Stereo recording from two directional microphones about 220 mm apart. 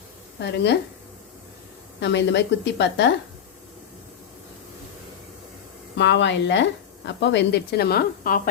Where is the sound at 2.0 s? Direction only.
50° left (ahead or behind).